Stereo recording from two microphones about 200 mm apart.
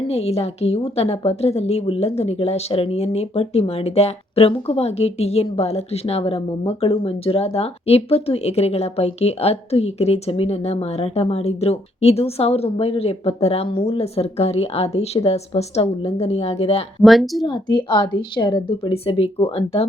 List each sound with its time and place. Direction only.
0.1 s a woman's voice: 30° left (ahead or behind)
17.0 s speech: centre (ahead or behind)
17.4 s a woman's voice: 20° left (ahead or behind)